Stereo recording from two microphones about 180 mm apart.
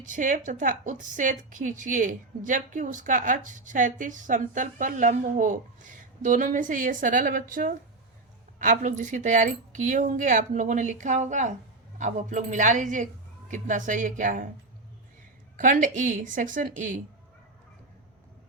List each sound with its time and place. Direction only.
0.0 s a woman's voice: 45° right (ahead or behind)
15.5 s a woman's voice: 45° right (ahead or behind)